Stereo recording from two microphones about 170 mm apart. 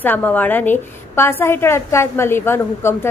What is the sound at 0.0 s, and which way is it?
A woman's voice, 10° left (ahead or behind).